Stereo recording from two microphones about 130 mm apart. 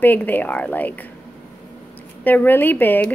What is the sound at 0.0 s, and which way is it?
Speech, 15° left (ahead or behind).